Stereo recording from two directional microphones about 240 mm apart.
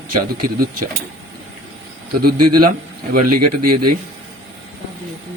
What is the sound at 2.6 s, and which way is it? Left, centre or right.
Speech, right.